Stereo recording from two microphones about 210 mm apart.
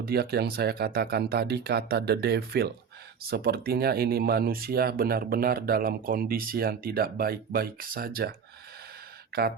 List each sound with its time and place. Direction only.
0.0 s speech: 50° right (ahead or behind)
9.3 s speech: 45° right (ahead or behind)